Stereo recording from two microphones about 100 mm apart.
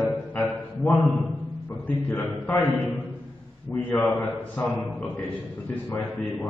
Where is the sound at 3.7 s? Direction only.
15° left (ahead or behind).